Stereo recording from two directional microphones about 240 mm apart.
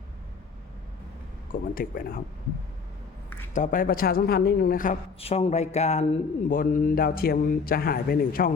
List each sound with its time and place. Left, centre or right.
1.7 s a man's voice: left
3.5 s a man's voice: left